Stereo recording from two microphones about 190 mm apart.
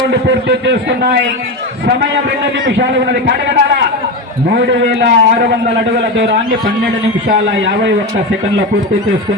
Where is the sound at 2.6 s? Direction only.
60° right (ahead or behind).